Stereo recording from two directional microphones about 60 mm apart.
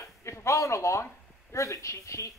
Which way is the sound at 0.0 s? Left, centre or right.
Left.